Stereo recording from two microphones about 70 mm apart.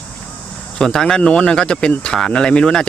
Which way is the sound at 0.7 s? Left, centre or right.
Centre.